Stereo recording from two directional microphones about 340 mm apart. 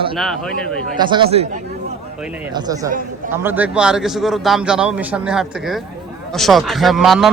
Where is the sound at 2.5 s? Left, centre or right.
Centre.